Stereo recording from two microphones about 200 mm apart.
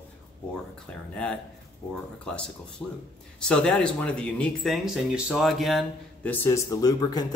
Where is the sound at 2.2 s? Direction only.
5° left (ahead or behind).